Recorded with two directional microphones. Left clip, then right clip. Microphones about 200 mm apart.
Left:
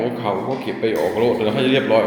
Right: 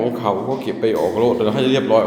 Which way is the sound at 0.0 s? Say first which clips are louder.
Right 2 dB; 10° right (ahead or behind).